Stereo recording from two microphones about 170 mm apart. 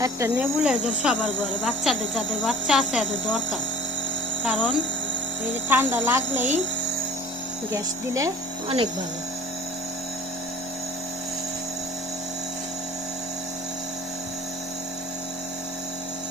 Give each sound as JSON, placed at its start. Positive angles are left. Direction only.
{"t": 0.0, "sound": "a woman's voice", "side_deg": -15}
{"t": 0.6, "sound": "speech", "side_deg": -5}
{"t": 4.4, "sound": "a woman's voice", "side_deg": -5}
{"t": 7.7, "sound": "a woman's voice", "side_deg": -20}